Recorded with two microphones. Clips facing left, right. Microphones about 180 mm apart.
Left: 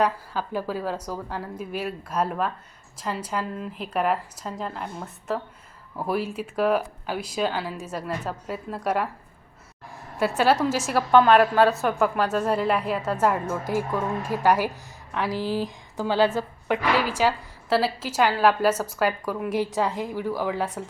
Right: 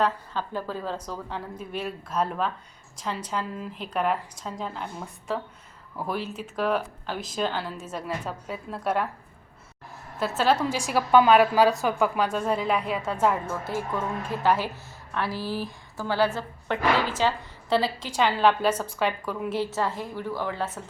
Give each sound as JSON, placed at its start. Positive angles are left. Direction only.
{"t": 0.0, "sound": "a woman's voice", "side_deg": 10}
{"t": 10.2, "sound": "a woman's voice", "side_deg": 10}